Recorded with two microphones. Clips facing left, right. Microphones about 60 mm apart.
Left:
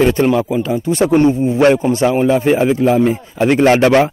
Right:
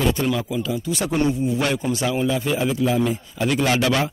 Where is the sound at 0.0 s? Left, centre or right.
Left.